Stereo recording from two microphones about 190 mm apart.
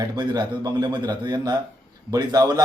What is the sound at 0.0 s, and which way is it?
A man's voice, 20° right (ahead or behind).